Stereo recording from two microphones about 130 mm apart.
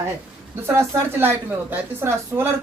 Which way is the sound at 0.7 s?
20° right (ahead or behind).